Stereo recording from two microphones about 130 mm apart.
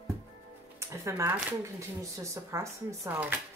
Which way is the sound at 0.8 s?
20° right (ahead or behind).